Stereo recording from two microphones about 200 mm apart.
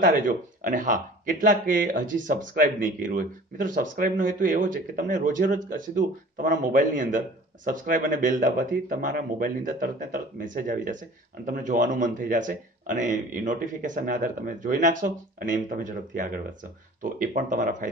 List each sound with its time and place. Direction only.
0.0 s speech: 40° right (ahead or behind)